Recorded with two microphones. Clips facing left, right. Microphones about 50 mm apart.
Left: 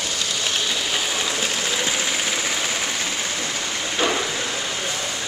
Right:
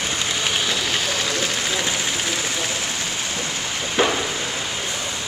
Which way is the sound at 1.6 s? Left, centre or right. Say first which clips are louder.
Even; centre.